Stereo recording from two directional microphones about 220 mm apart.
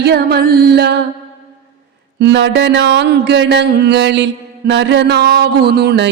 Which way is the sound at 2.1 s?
55° right (ahead or behind).